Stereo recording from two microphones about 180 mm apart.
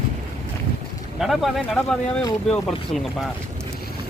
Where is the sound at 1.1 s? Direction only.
Centre (ahead or behind).